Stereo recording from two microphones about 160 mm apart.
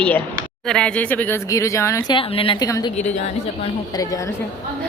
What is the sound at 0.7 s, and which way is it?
Speech, 5° left (ahead or behind).